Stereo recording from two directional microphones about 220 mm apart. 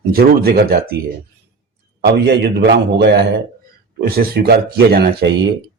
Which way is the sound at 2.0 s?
50° right (ahead or behind).